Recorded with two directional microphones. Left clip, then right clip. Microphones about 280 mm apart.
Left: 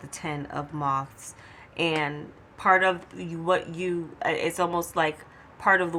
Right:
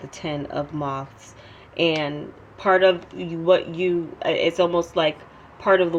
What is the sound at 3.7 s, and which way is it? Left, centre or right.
Speech, left.